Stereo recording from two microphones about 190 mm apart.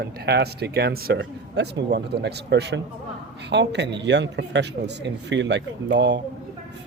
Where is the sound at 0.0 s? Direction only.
60° right (ahead or behind).